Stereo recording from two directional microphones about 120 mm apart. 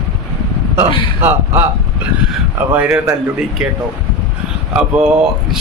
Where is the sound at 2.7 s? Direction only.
15° right (ahead or behind).